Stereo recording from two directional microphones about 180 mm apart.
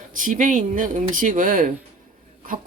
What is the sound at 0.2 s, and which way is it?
Speech, 50° right (ahead or behind).